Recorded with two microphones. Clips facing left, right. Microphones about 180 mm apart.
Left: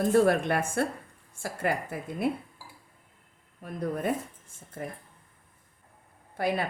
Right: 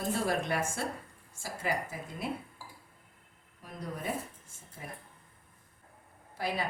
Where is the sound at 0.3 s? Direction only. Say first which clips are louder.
Left 6 dB; 60° left (ahead or behind).